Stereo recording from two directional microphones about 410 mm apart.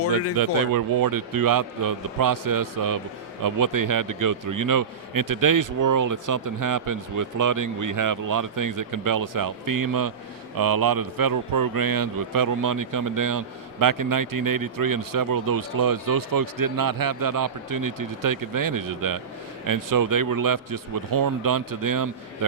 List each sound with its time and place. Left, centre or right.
0.3 s a man's voice: right